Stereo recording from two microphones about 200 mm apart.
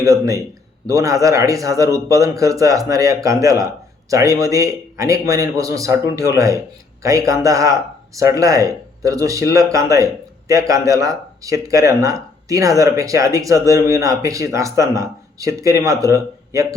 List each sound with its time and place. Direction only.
0.0 s speech: 15° right (ahead or behind)